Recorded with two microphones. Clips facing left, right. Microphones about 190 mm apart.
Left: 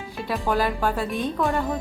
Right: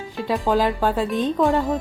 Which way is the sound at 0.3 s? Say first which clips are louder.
Right 4 dB; 15° right (ahead or behind).